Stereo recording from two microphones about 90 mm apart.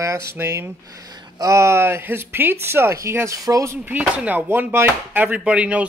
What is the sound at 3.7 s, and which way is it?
Speech, 20° right (ahead or behind).